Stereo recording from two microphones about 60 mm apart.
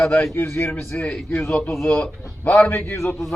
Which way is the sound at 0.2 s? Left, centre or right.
Left.